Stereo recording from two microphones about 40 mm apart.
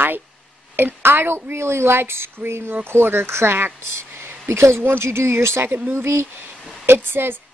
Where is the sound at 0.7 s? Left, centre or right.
Right.